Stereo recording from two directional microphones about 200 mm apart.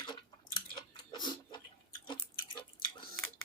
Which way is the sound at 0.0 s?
25° left (ahead or behind).